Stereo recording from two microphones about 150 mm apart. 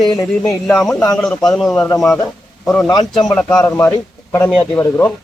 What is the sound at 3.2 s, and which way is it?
A man's voice, 5° left (ahead or behind).